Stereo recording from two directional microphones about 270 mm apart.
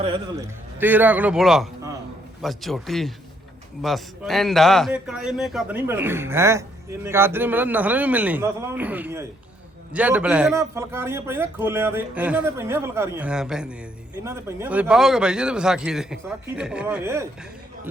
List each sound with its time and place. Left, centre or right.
0.0 s a man's voice: centre
0.8 s a man's voice: centre